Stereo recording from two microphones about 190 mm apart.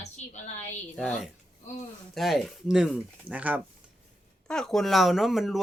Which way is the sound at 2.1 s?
Centre (ahead or behind).